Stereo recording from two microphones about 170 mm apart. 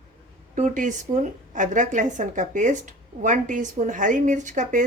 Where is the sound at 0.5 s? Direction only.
45° right (ahead or behind).